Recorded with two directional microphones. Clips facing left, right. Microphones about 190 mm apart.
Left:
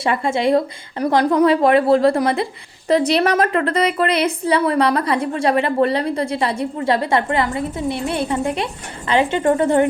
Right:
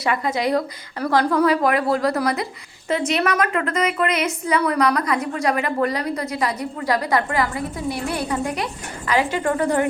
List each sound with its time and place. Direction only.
0.0 s a woman's voice: 25° left (ahead or behind)